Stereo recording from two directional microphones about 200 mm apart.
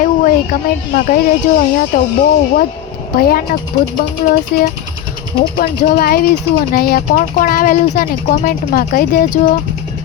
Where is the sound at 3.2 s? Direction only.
50° left (ahead or behind).